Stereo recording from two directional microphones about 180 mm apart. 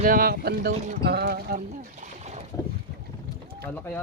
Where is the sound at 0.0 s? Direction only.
55° right (ahead or behind).